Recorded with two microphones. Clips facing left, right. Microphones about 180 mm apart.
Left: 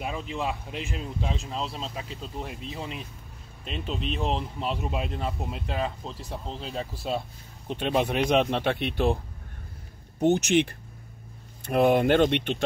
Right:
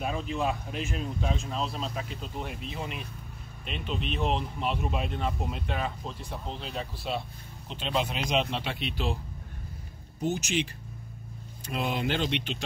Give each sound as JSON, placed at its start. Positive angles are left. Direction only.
{"t": 0.0, "sound": "speech", "side_deg": 20}
{"t": 7.6, "sound": "speech", "side_deg": 60}
{"t": 10.2, "sound": "speech", "side_deg": 65}